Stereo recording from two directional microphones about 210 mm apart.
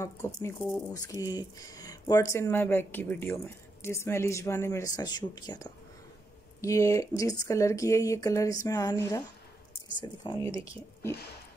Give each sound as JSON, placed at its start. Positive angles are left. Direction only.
{"t": 0.0, "sound": "speech", "side_deg": 15}